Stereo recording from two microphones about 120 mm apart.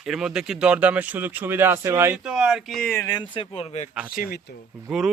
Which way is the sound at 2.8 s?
20° left (ahead or behind).